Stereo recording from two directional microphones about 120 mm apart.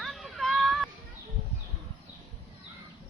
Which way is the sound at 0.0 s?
Centre (ahead or behind).